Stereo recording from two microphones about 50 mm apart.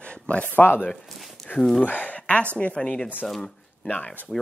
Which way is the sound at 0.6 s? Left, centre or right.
Left.